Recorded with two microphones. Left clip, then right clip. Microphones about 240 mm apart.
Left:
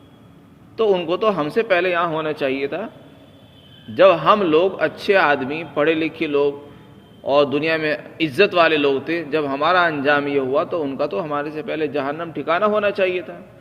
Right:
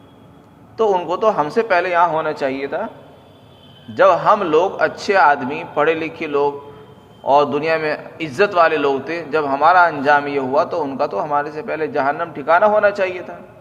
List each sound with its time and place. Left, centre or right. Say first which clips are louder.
0.8 s a man's voice: right 2 dB; left
3.9 s a man's voice: right 1 dB; left